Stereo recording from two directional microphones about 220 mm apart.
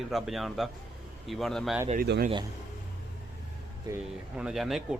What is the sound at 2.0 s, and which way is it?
Speech, 45° right (ahead or behind).